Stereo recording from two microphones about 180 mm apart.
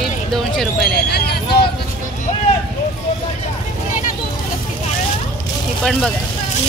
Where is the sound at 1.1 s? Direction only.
60° left (ahead or behind).